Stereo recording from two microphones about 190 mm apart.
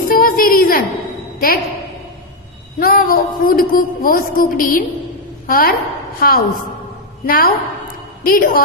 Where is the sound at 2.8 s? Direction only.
50° left (ahead or behind).